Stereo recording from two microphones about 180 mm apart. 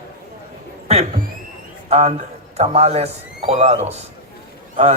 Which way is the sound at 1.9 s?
35° right (ahead or behind).